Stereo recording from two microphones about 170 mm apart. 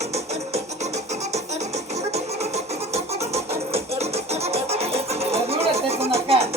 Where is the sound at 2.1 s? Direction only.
40° right (ahead or behind).